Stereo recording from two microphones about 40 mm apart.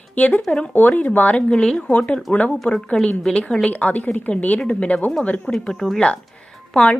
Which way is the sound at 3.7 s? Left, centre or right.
Left.